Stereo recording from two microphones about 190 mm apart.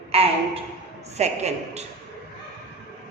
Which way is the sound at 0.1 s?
30° right (ahead or behind).